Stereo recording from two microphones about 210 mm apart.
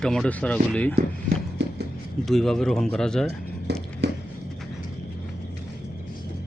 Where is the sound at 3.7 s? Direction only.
50° right (ahead or behind).